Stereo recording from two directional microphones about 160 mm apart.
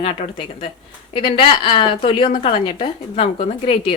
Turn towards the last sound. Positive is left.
turn(degrees=35)  # may be behind; listen again after turning